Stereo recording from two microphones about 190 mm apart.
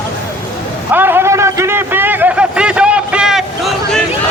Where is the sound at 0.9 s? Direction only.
10° right (ahead or behind).